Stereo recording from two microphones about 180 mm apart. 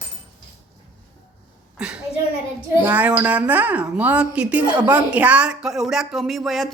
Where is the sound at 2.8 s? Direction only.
10° right (ahead or behind).